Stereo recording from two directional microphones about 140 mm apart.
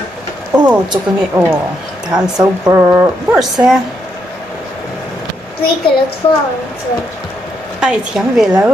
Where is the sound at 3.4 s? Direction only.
Centre (ahead or behind).